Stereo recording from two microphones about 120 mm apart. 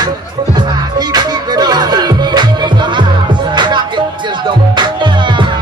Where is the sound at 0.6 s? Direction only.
35° right (ahead or behind).